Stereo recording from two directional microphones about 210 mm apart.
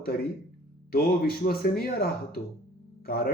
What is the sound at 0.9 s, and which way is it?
Speech, 45° left (ahead or behind).